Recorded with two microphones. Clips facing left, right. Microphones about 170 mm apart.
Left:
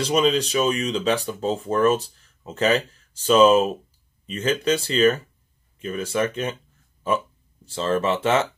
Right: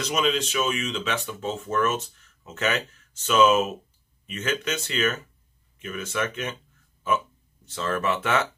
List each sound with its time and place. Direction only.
0.0 s speech: 35° left (ahead or behind)
7.6 s speech: 30° left (ahead or behind)